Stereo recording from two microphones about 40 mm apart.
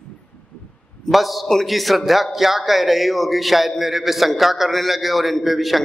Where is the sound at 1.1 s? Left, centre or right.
Centre.